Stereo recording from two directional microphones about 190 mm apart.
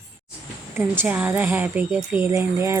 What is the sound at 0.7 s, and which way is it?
A woman's voice, 10° right (ahead or behind).